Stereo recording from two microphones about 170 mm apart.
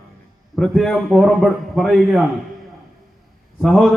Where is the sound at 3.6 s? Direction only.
Centre (ahead or behind).